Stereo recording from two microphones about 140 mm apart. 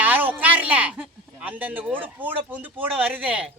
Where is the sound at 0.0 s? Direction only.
15° right (ahead or behind).